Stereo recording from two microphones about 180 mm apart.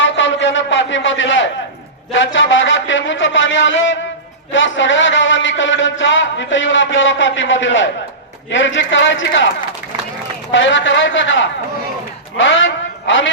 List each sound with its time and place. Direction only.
0.0 s a sound: 90° left
2.1 s a man's voice: 90° left
10.5 s a man's voice: 90° left